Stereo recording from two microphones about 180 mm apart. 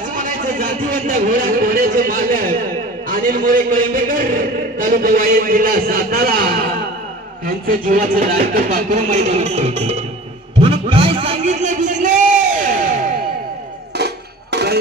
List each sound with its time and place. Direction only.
0.6 s a man's voice: 50° right (ahead or behind)
10.6 s a sound: 30° right (ahead or behind); by 13.1 s 45° right (ahead or behind)
13.9 s music: 65° right (ahead or behind)